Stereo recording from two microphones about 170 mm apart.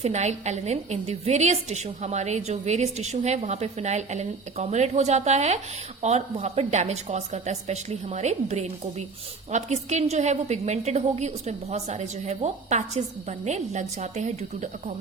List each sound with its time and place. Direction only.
0.0 s a woman's voice: 40° right (ahead or behind)